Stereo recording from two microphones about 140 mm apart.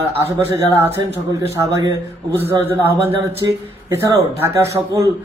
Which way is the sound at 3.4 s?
30° right (ahead or behind).